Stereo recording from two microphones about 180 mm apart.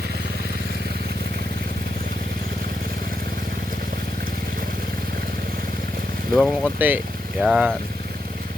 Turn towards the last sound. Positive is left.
turn(degrees=-5)  # may be behind; listen again after turning